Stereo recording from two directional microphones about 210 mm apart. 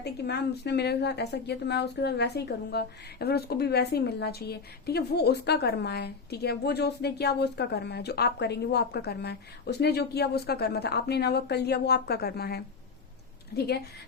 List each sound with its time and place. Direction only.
0.0 s speech: 50° left (ahead or behind)